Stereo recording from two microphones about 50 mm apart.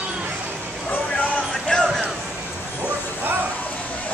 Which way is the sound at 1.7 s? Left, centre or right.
Centre.